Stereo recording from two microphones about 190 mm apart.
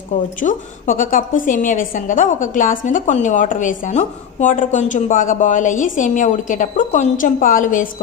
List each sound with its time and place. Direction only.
0.3 s a woman's voice: 45° left (ahead or behind)